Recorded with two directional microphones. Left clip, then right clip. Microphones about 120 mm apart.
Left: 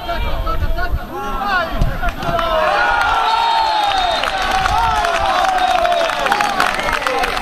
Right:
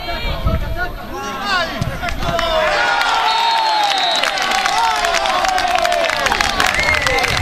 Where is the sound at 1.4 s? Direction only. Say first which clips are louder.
Even; 30° right (ahead or behind).